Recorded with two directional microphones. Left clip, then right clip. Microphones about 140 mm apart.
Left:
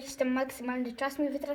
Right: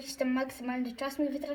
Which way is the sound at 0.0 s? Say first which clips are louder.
Left 2 dB; 55° left (ahead or behind).